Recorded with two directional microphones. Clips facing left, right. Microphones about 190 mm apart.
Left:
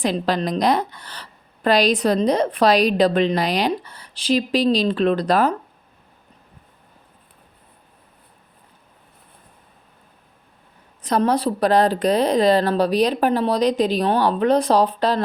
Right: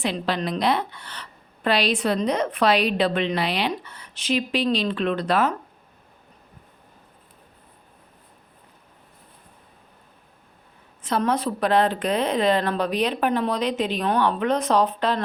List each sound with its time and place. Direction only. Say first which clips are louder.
0.0 s a woman's voice: left 4 dB; 40° left (ahead or behind)
11.0 s a woman's voice: left 4 dB; 40° left (ahead or behind)